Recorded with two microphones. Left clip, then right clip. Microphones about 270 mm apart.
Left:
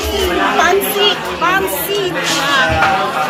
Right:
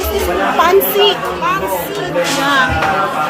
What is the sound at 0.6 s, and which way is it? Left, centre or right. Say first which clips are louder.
Children playing: right 2 dB; right.